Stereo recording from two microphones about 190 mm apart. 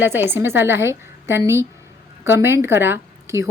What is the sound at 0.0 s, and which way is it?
A woman's voice, 10° right (ahead or behind).